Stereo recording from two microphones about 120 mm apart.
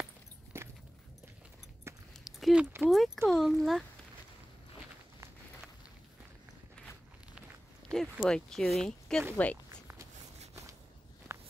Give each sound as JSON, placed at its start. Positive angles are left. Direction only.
{"t": 0.5, "sound": "keys jangling", "side_deg": -20}
{"t": 2.2, "sound": "a sound", "side_deg": -5}
{"t": 2.8, "sound": "speech", "side_deg": 0}
{"t": 7.9, "sound": "speech", "side_deg": 5}